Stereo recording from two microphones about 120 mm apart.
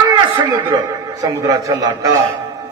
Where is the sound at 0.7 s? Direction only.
30° right (ahead or behind).